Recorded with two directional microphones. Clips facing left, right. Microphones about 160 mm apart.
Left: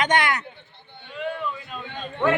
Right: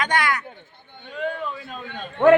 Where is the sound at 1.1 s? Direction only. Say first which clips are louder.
Right 2 dB; 45° right (ahead or behind).